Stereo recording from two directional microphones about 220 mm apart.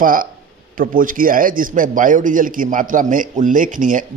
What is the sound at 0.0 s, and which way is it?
A man's voice, 40° right (ahead or behind).